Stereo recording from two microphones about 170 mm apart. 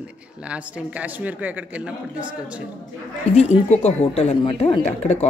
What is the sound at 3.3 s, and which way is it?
Speech, 40° left (ahead or behind).